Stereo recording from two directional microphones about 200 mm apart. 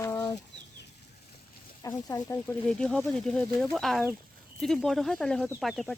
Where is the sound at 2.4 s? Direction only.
5° left (ahead or behind).